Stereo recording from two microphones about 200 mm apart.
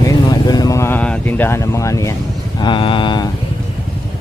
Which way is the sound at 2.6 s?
25° left (ahead or behind).